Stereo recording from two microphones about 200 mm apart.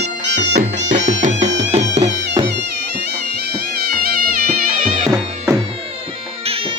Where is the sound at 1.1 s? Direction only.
35° right (ahead or behind).